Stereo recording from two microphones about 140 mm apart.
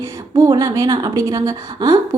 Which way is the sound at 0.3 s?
25° right (ahead or behind).